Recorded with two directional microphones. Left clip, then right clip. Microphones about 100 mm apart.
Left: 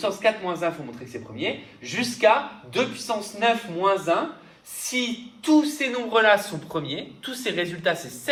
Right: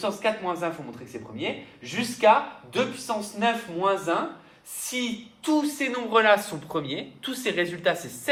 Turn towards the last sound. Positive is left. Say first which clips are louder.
# even
turn(degrees=-65)  # may be behind; listen again after turning